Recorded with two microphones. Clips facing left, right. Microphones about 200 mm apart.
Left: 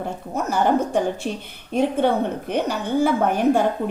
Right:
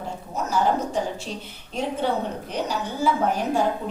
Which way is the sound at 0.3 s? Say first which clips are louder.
Left 3 dB; 55° left (ahead or behind).